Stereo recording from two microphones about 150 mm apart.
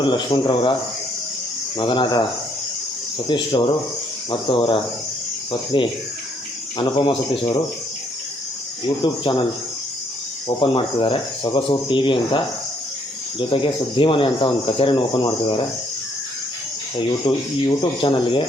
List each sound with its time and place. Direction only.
0.0 s speech: 30° left (ahead or behind)
1.8 s speech: 30° left (ahead or behind)
3.2 s speech: 30° left (ahead or behind)
10.6 s speech: 35° left (ahead or behind)
13.5 s speech: 35° left (ahead or behind)
17.0 s speech: 35° left (ahead or behind)